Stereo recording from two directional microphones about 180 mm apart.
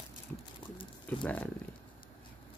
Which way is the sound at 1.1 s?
10° left (ahead or behind).